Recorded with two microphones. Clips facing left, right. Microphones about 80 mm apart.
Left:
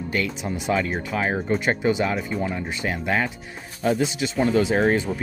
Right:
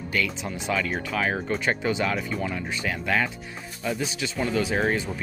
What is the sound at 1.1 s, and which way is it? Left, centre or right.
Speech, left.